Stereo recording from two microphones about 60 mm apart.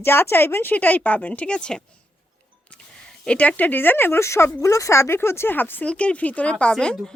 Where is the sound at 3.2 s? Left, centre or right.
Centre; by 4.3 s left.